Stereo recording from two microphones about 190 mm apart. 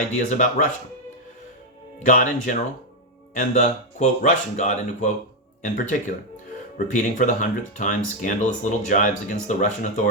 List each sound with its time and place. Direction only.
0.1 s speech: 40° left (ahead or behind)
2.0 s speech: 40° left (ahead or behind)